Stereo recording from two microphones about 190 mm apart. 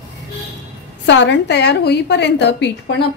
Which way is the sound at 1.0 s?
65° left (ahead or behind).